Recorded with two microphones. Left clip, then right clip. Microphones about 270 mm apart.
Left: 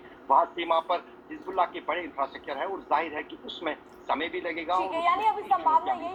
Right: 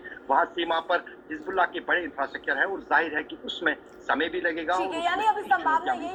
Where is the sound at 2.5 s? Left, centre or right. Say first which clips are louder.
Right 6 dB; right.